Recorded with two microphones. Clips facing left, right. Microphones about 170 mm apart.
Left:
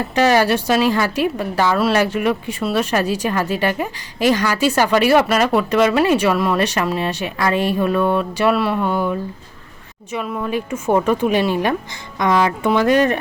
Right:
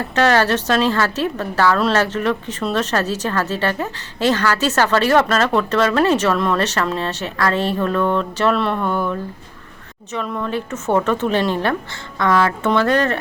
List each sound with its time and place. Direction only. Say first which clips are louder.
0.0 s a woman's voice: left 1 dB; 10° left (ahead or behind)